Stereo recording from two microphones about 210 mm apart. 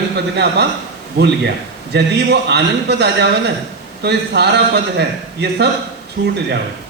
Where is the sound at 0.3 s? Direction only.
55° right (ahead or behind).